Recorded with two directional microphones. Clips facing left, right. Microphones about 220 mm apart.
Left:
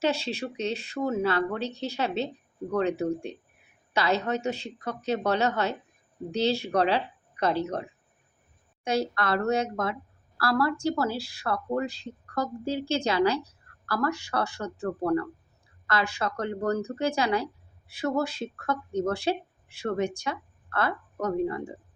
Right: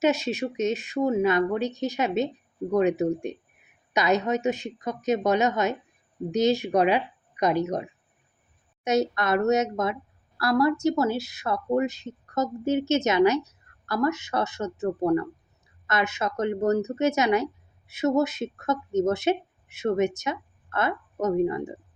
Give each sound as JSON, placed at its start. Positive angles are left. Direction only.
{"t": 0.0, "sound": "speech", "side_deg": -15}